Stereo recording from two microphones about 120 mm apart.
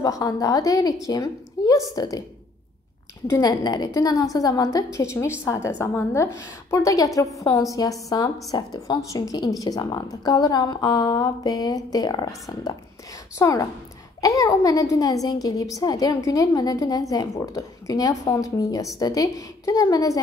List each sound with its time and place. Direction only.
0.0 s a child's voice: 30° left (ahead or behind)
3.3 s a woman's voice: 30° left (ahead or behind)